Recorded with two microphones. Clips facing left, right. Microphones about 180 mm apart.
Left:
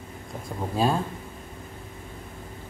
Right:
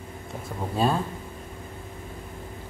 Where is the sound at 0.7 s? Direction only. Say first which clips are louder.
Even; centre (ahead or behind).